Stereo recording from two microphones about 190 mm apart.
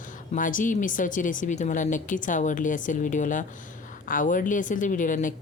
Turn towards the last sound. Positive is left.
turn(degrees=45)  # may be behind; listen again after turning